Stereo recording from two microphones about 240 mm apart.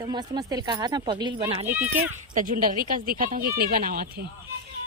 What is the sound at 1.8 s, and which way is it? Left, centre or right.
Speech, right.